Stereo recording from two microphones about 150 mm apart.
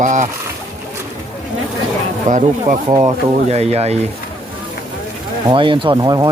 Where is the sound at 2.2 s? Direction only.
60° right (ahead or behind).